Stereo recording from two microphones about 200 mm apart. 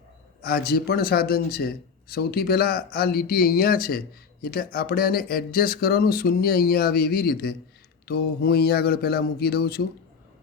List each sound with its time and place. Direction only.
0.4 s speech: 50° left (ahead or behind)